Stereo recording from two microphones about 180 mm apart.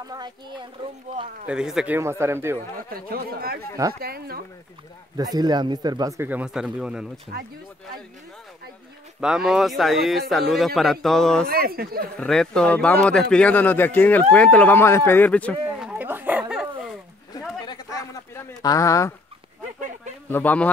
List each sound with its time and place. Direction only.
0.1 s speech: 25° right (ahead or behind)
1.5 s a man's voice: 5° right (ahead or behind)
2.0 s speech: 15° right (ahead or behind)
2.9 s speech: 55° right (ahead or behind)
5.1 s speech: 20° right (ahead or behind); by 7.1 s 5° right (ahead or behind)
7.3 s speech: 65° right (ahead or behind)
9.2 s a man's voice: 5° right (ahead or behind)
11.4 s speech: 55° right (ahead or behind)
12.2 s speech: 5° left (ahead or behind)
15.8 s dog: 5° right (ahead or behind)
17.3 s a sound: 20° left (ahead or behind)
18.6 s speech: 20° left (ahead or behind)
20.2 s speech: 10° left (ahead or behind)